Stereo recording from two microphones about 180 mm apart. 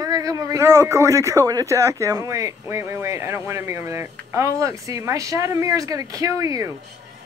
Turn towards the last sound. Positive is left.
turn(degrees=-15)  # may be behind; listen again after turning